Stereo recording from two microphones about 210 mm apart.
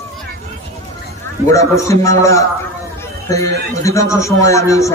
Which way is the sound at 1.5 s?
15° left (ahead or behind).